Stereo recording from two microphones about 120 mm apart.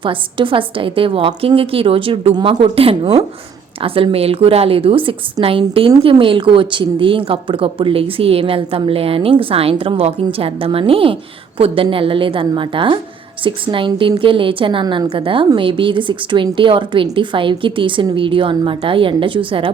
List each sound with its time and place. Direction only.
0.0 s speech: 45° right (ahead or behind)